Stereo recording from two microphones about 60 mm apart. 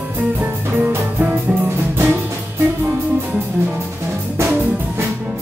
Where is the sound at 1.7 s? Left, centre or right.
Right.